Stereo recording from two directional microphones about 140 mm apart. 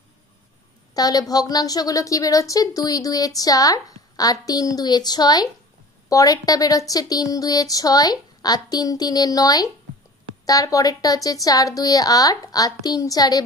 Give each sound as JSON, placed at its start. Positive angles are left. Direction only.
{"t": 0.9, "sound": "a woman's voice", "side_deg": 25}